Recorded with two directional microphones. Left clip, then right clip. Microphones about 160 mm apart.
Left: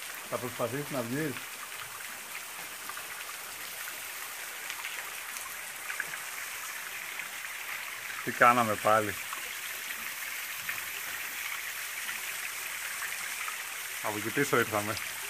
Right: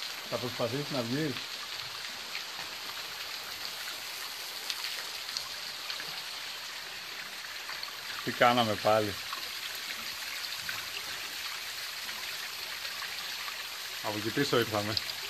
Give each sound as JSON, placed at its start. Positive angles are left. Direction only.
{"t": 0.3, "sound": "speech", "side_deg": 20}
{"t": 8.4, "sound": "speech", "side_deg": 5}
{"t": 14.0, "sound": "speech", "side_deg": 10}